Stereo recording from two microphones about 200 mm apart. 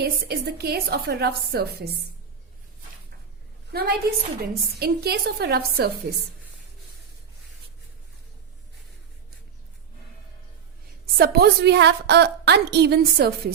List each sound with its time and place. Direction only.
0.0 s a woman's voice: 50° right (ahead or behind)
3.7 s a woman's voice: 50° right (ahead or behind)
11.0 s a woman's voice: 50° right (ahead or behind)